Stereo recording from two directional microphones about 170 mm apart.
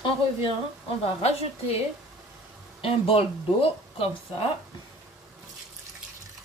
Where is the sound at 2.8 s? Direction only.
30° left (ahead or behind).